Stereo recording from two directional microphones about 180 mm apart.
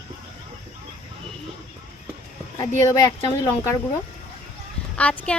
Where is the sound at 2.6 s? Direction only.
20° left (ahead or behind).